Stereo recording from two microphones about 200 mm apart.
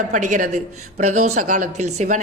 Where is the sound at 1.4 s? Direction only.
40° right (ahead or behind).